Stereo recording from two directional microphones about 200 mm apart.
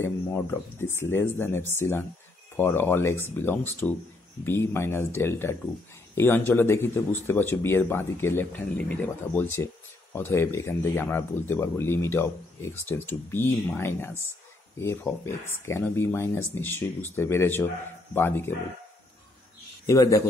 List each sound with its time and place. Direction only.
0.0 s speech: 10° left (ahead or behind)
19.9 s speech: 15° left (ahead or behind)